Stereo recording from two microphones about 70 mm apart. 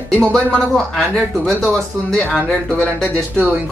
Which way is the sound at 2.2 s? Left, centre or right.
Centre.